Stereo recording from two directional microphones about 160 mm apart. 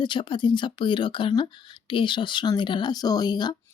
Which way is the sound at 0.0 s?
30° left (ahead or behind).